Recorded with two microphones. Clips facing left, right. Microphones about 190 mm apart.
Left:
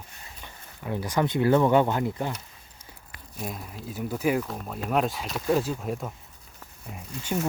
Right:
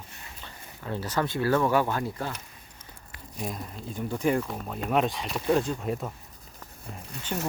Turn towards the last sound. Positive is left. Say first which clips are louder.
# left 4 dB
turn(degrees=10)  # may be behind; listen again after turning